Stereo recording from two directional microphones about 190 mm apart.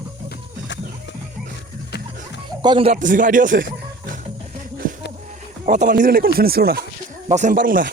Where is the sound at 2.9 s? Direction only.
45° right (ahead or behind).